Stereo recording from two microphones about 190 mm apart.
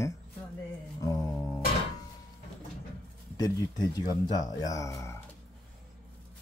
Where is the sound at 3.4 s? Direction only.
20° left (ahead or behind).